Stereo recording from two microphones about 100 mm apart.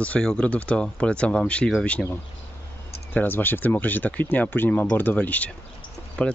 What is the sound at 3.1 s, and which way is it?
Speech, 20° left (ahead or behind).